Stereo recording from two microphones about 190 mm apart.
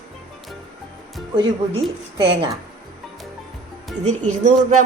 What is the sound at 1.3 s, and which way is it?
Speech, 25° right (ahead or behind).